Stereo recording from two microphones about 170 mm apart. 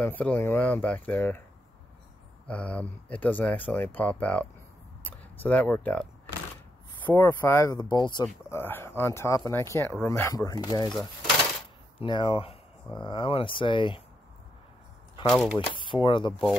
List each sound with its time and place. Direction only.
0.0 s speech: 10° left (ahead or behind)
2.4 s speech: 5° left (ahead or behind)
7.1 s speech: 10° left (ahead or behind); by 8.3 s 25° left (ahead or behind)
8.5 s speech: 15° left (ahead or behind)
12.0 s speech: 30° left (ahead or behind)
15.2 s speech: centre (ahead or behind)
15.7 s speech: 30° left (ahead or behind)